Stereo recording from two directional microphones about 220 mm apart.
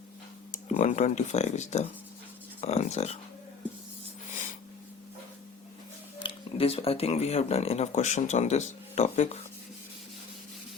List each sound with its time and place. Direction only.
0.5 s speech: 35° left (ahead or behind)
6.2 s speech: 25° left (ahead or behind)